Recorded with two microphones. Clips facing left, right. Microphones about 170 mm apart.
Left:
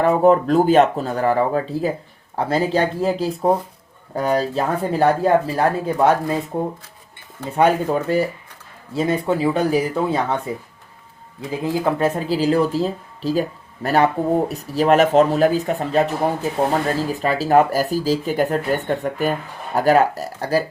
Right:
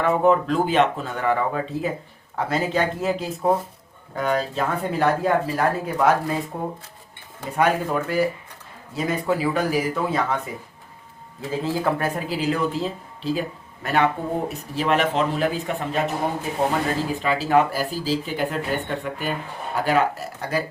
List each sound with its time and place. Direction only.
0.0 s speech: 35° left (ahead or behind)
11.3 s speech: 15° left (ahead or behind); by 16.0 s 40° left (ahead or behind)
17.2 s speech: 40° left (ahead or behind)